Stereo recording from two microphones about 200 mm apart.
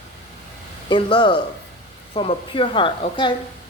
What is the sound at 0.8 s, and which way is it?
Speech, 25° left (ahead or behind).